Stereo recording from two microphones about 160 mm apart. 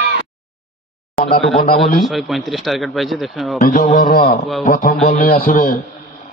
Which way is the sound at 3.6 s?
60° left (ahead or behind).